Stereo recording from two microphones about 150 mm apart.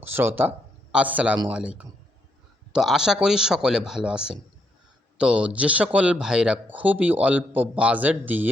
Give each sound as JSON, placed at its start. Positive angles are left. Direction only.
{"t": 0.0, "sound": "a man's voice", "side_deg": -15}
{"t": 2.7, "sound": "speech", "side_deg": -5}